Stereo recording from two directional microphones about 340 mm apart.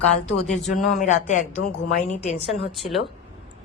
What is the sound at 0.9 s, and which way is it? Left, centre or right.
A woman's voice, left.